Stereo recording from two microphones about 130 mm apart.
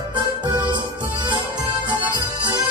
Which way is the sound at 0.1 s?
35° right (ahead or behind).